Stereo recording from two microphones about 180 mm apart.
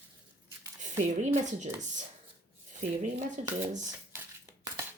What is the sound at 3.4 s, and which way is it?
Speech, 40° right (ahead or behind).